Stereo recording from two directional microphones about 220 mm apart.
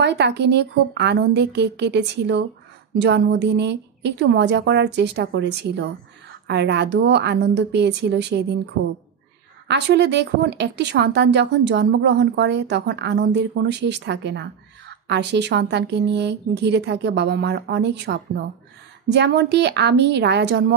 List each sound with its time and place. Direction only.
0.0 s speech: 50° right (ahead or behind)
9.7 s speech: 50° right (ahead or behind)